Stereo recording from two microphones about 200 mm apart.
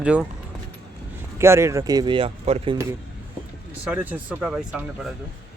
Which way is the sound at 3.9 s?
5° right (ahead or behind).